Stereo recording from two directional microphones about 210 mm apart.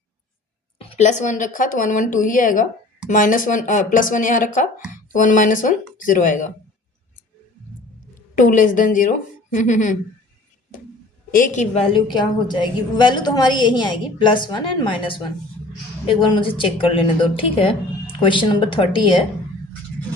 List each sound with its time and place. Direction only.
0.8 s speech: 30° left (ahead or behind)
8.4 s speech: 40° left (ahead or behind)
11.3 s speech: 40° left (ahead or behind)
12.1 s a woman's voice: 20° left (ahead or behind)